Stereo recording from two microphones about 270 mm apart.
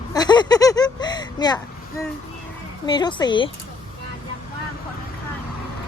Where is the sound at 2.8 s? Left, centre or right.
Centre.